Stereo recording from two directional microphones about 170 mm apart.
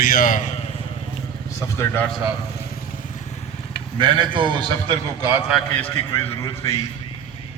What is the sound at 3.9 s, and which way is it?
A man's voice, 30° right (ahead or behind).